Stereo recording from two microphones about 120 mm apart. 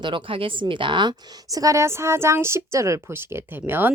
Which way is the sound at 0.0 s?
45° right (ahead or behind).